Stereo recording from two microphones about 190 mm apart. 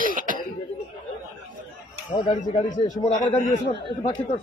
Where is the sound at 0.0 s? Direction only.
45° right (ahead or behind).